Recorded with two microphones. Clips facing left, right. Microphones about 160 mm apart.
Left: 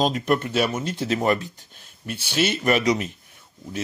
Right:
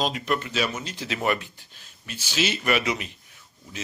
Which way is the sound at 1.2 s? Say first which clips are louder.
Left 2 dB; 35° left (ahead or behind).